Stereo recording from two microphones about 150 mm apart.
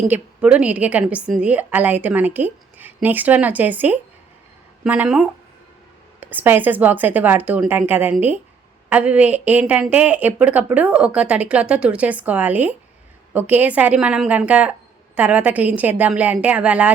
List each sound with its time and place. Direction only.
0.1 s a woman's voice: 10° right (ahead or behind)